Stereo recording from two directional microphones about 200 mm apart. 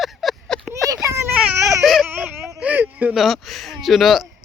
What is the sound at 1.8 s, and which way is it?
Speech, centre (ahead or behind).